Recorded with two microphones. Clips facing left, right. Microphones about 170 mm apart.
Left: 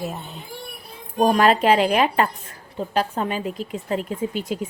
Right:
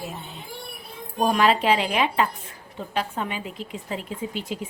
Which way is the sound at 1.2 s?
45° left (ahead or behind).